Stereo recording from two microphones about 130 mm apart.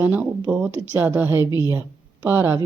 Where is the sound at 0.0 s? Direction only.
15° right (ahead or behind).